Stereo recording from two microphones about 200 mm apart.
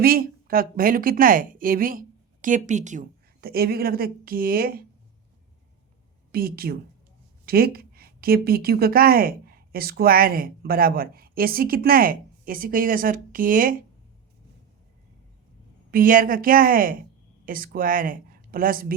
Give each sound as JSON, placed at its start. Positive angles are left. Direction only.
{"t": 0.0, "sound": "a woman's voice", "side_deg": -45}
{"t": 6.3, "sound": "a woman's voice", "side_deg": -50}
{"t": 15.9, "sound": "a woman's voice", "side_deg": -45}